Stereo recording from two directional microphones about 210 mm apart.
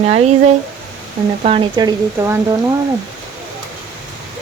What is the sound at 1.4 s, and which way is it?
Speech, 25° right (ahead or behind).